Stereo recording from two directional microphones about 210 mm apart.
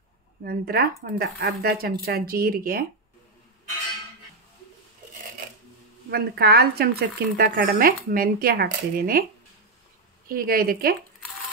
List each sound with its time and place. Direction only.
0.4 s speech: 45° right (ahead or behind)
6.0 s speech: 50° right (ahead or behind)
10.2 s speech: 45° right (ahead or behind)